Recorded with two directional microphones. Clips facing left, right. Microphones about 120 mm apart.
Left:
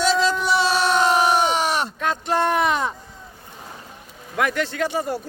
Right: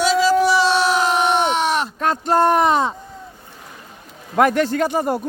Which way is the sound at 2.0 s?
40° right (ahead or behind).